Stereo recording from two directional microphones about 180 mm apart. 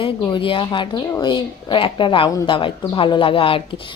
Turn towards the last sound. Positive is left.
turn(degrees=30)  # may be behind; listen again after turning